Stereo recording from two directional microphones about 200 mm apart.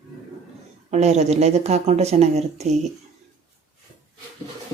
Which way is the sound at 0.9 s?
35° right (ahead or behind).